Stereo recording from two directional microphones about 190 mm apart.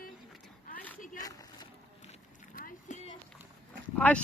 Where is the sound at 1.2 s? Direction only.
20° left (ahead or behind).